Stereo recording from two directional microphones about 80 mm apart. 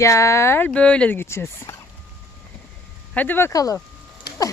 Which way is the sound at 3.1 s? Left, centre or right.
Left.